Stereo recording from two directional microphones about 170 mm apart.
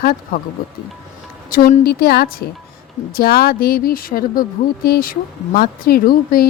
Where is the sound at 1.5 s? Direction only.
65° left (ahead or behind).